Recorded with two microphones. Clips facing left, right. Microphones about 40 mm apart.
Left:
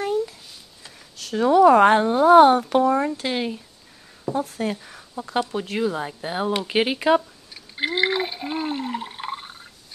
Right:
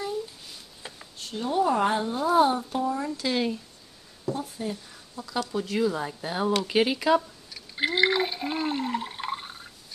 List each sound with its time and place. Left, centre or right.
1.1 s speech: left
3.3 s speech: centre
4.3 s speech: left
5.1 s speech: left
7.2 s a sound: centre